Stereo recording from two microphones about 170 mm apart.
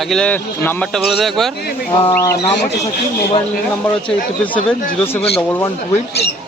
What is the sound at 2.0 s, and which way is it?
Speech, 20° left (ahead or behind).